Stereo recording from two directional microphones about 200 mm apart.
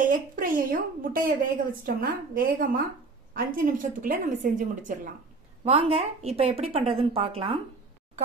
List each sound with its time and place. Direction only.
0.0 s a woman's voice: 40° right (ahead or behind)